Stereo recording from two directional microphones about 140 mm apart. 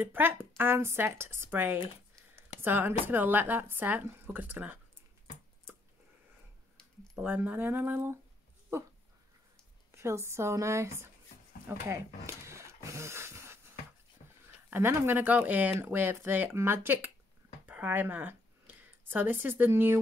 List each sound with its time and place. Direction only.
0.0 s speech: 15° right (ahead or behind)
7.2 s speech: 10° right (ahead or behind)
9.8 s speech: 20° right (ahead or behind)
11.6 s a sound: 20° right (ahead or behind)
14.7 s speech: 15° right (ahead or behind)